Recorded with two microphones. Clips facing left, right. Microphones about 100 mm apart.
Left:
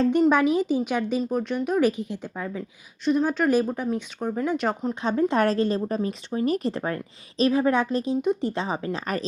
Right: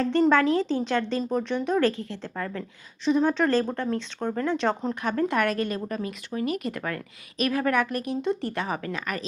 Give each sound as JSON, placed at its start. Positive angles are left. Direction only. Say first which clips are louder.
{"t": 0.0, "sound": "a woman's voice", "louder": "left 1 dB", "side_deg": 15}
{"t": 1.9, "sound": "a woman's voice", "louder": "left 3 dB", "side_deg": 15}
{"t": 5.0, "sound": "a woman's voice", "louder": "left 3 dB", "side_deg": 20}